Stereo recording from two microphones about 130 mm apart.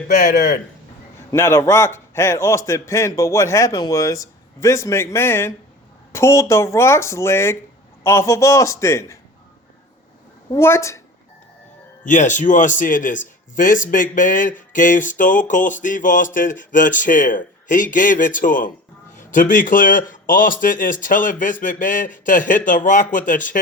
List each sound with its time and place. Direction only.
0.1 s speech: 75° left (ahead or behind)
1.3 s a man's voice: 20° left (ahead or behind)
10.5 s a man's voice: 20° left (ahead or behind)
12.0 s speech: 70° left (ahead or behind); by 23.6 s 90° left